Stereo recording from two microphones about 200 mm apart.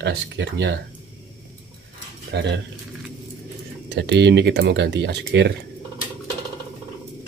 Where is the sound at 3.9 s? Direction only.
60° right (ahead or behind).